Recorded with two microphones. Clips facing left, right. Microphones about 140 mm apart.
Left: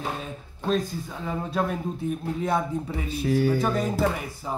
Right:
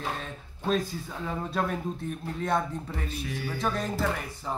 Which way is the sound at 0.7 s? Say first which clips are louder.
Left 2 dB; centre (ahead or behind).